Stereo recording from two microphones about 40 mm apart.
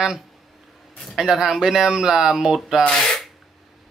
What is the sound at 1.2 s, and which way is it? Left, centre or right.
Speech, centre.